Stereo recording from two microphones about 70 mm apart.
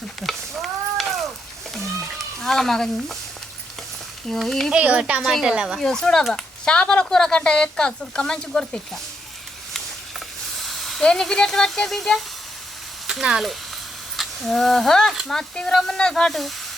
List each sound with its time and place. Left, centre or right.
0.2 s stir: centre
1.7 s a sound: centre
4.3 s speech: centre
4.7 s speech: centre
5.2 s speech: centre
5.8 s speech: centre
10.6 s speech: centre
13.1 s speech: centre
15.1 s speech: centre
15.4 s speech: centre